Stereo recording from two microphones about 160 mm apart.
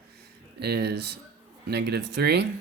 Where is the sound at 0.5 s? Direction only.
90° right.